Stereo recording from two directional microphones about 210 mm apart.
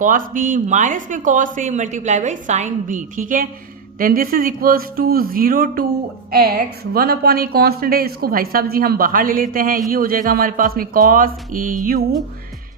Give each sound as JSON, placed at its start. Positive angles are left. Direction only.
{"t": 0.0, "sound": "a woman's voice", "side_deg": -40}
{"t": 6.9, "sound": "a woman's voice", "side_deg": -45}